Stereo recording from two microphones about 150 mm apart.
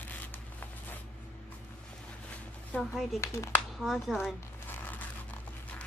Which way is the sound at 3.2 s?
15° left (ahead or behind).